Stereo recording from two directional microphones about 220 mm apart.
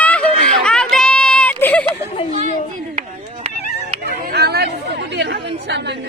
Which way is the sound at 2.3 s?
35° right (ahead or behind).